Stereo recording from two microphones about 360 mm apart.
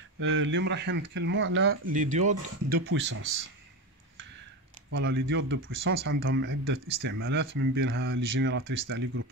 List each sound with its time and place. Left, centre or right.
0.2 s speech: right
4.9 s speech: right